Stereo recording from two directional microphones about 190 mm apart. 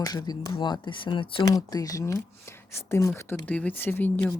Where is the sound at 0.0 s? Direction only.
20° left (ahead or behind).